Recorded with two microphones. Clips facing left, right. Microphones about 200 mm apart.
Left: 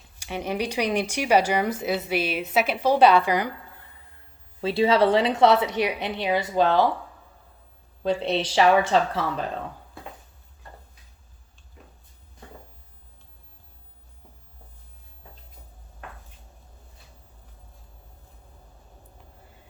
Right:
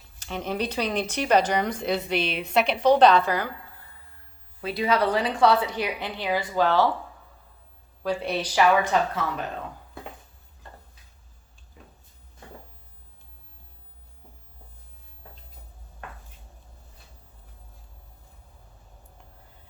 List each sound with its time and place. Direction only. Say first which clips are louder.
0.2 s speech: left 1 dB; 10° left (ahead or behind)
4.6 s a woman's voice: left 4 dB; 25° left (ahead or behind)
8.0 s a woman's voice: left 3 dB; 25° left (ahead or behind)